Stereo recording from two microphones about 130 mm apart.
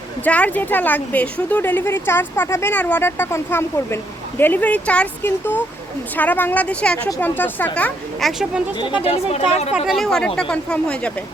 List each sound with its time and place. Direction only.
0.3 s speech: 10° left (ahead or behind)
8.8 s speech: 40° left (ahead or behind)
9.3 s speech: 55° left (ahead or behind)
9.7 s speech: centre (ahead or behind)